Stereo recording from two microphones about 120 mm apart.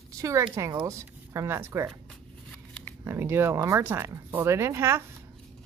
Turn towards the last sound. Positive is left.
turn(degrees=-20)  # may be behind; listen again after turning